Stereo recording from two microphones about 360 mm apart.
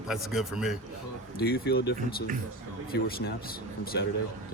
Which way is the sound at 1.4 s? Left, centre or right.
Left.